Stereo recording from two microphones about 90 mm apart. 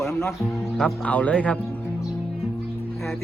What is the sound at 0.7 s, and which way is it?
Speech, 10° left (ahead or behind).